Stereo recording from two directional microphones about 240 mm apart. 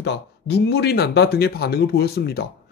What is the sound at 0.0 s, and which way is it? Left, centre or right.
Speech, left.